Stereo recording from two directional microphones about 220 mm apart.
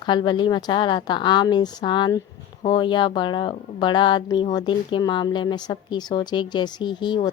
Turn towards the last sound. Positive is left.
turn(degrees=20)  # may be behind; listen again after turning